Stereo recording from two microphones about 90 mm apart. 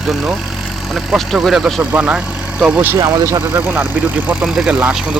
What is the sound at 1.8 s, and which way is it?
Speech, 20° right (ahead or behind).